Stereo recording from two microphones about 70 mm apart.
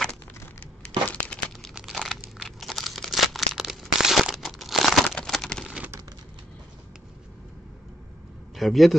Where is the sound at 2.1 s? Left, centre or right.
Centre.